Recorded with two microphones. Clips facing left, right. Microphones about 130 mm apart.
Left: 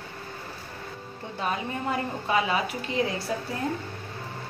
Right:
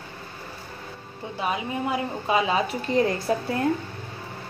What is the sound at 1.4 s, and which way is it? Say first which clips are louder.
A woman's voice: right 2 dB; 15° right (ahead or behind).